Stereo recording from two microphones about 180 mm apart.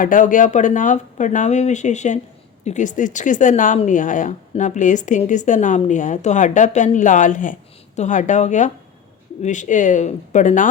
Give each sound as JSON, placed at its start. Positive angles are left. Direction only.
{"t": 0.0, "sound": "speech", "side_deg": 50}